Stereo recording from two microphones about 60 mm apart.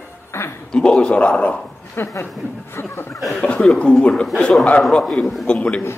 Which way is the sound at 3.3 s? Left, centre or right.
Centre.